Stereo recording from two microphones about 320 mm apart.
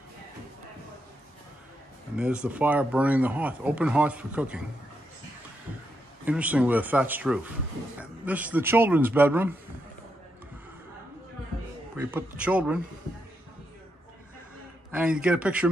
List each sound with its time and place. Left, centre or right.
2.1 s speech: centre
6.2 s speech: centre
12.0 s speech: centre
14.9 s speech: centre